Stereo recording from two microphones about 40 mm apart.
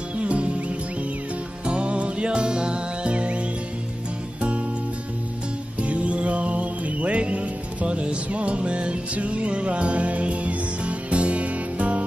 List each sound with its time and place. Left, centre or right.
0.2 s music: right
4.4 s music: right
5.8 s music: right